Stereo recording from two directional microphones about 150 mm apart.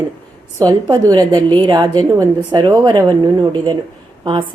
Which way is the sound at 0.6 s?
25° right (ahead or behind).